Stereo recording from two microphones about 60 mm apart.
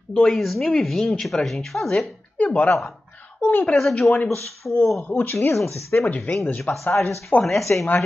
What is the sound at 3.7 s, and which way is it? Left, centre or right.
Speech, centre.